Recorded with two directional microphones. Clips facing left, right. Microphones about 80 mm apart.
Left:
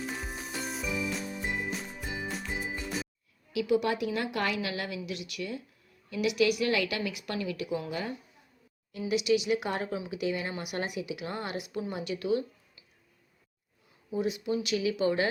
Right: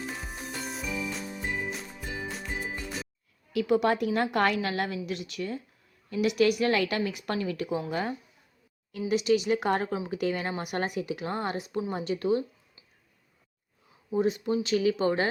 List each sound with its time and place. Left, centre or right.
0.0 s music: centre
2.2 s music: centre
3.5 s a woman's voice: right
14.1 s speech: right